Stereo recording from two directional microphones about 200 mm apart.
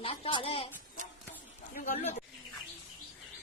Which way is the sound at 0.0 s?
25° left (ahead or behind).